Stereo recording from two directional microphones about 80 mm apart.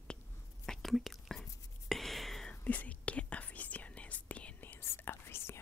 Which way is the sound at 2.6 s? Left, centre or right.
Centre.